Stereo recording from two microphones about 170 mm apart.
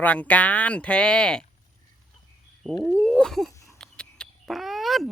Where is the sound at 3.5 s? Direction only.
20° left (ahead or behind).